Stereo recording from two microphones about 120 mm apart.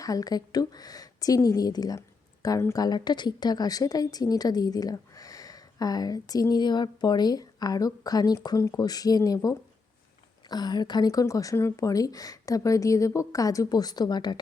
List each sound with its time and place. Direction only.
0.0 s speech: 30° left (ahead or behind)
2.8 s a woman's voice: 35° left (ahead or behind)